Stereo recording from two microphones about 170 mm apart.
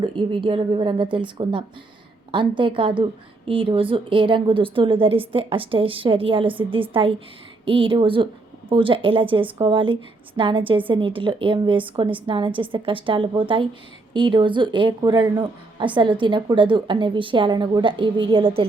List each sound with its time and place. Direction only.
0.0 s a woman's voice: 30° right (ahead or behind)